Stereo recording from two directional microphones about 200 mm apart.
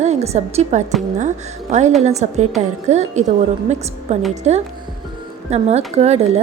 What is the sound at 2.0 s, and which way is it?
A woman's voice, 35° right (ahead or behind).